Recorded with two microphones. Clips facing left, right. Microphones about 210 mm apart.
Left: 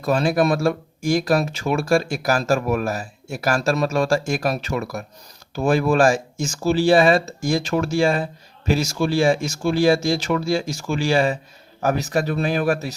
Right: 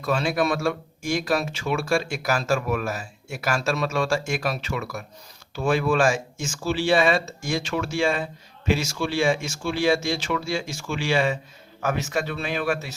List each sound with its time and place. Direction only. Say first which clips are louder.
0.0 s speech: left 5 dB; 35° left (ahead or behind)